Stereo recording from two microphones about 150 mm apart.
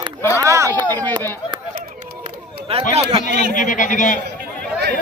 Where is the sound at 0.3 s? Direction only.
20° right (ahead or behind).